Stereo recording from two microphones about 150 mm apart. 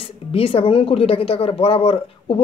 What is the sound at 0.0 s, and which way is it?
Speech, 40° left (ahead or behind).